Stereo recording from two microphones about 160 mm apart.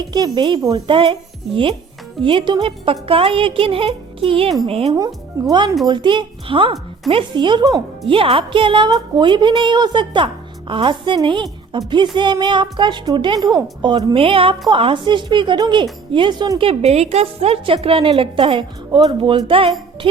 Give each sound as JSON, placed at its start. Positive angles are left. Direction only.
{"t": 0.0, "sound": "a woman's voice", "side_deg": -25}
{"t": 4.9, "sound": "a woman's voice", "side_deg": -25}